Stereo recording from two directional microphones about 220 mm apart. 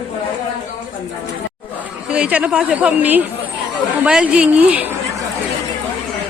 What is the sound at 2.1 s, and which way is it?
A woman's voice, 5° right (ahead or behind).